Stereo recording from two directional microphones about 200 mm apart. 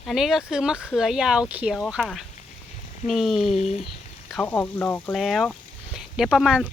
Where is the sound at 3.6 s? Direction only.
35° left (ahead or behind).